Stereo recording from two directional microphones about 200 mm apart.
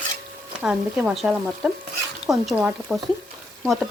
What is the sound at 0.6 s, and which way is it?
Speech, 5° right (ahead or behind).